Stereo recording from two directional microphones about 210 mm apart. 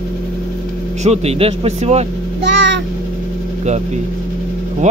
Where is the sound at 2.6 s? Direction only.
60° right (ahead or behind).